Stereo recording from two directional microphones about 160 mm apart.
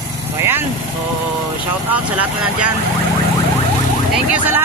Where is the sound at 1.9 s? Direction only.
10° right (ahead or behind).